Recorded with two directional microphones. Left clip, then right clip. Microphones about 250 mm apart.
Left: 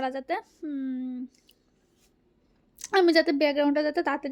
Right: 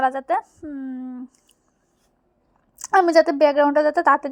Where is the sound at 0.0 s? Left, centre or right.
Centre.